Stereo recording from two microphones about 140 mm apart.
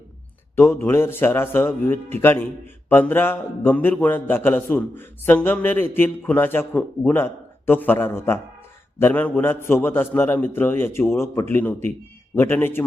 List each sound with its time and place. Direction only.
0.5 s a man's voice: 20° left (ahead or behind)